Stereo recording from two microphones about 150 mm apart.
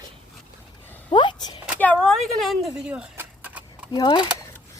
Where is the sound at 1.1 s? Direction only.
30° left (ahead or behind).